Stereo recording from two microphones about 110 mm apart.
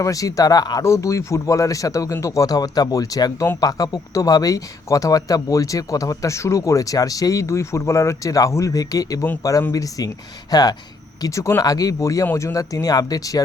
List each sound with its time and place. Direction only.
0.0 s speech: 30° left (ahead or behind)